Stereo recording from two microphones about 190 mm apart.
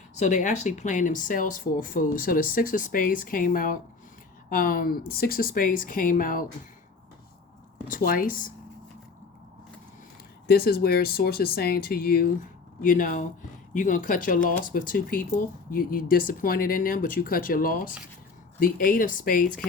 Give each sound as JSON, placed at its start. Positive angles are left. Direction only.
{"t": 0.2, "sound": "speech", "side_deg": 40}
{"t": 7.9, "sound": "speech", "side_deg": 50}
{"t": 10.4, "sound": "speech", "side_deg": 55}